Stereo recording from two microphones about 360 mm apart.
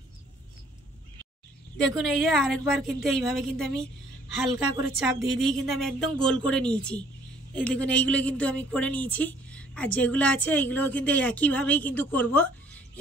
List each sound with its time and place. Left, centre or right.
1.8 s speech: centre